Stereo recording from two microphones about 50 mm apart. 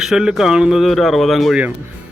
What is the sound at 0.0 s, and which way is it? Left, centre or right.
Speech, centre.